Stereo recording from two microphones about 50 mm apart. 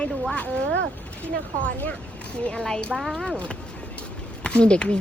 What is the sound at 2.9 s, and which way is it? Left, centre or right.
Speech, centre.